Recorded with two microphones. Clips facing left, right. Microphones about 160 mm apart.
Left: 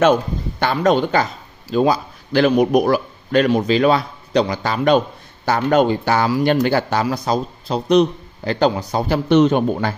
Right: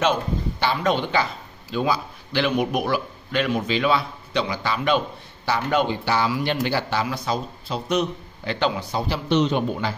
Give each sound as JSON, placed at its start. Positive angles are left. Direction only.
{"t": 0.0, "sound": "a man's voice", "side_deg": 50}